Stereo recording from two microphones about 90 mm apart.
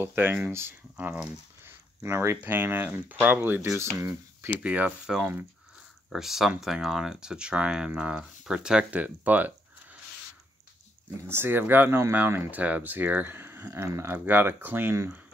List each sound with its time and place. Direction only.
0.0 s speech: 25° right (ahead or behind)
2.0 s speech: 30° right (ahead or behind)
3.6 s speech: 30° right (ahead or behind)
4.6 s speech: 20° right (ahead or behind)
6.1 s speech: 5° right (ahead or behind)
11.2 s speech: 25° right (ahead or behind)